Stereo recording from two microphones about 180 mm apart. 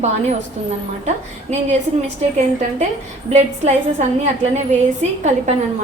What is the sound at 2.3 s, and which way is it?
A woman's voice, 40° right (ahead or behind).